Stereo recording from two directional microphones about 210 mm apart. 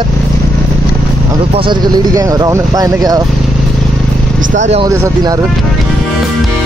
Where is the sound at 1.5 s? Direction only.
20° right (ahead or behind).